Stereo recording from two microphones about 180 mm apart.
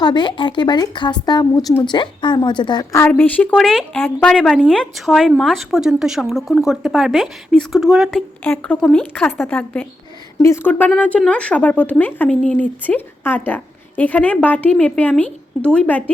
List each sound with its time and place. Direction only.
0.0 s speech: 25° left (ahead or behind); by 16.1 s 10° left (ahead or behind)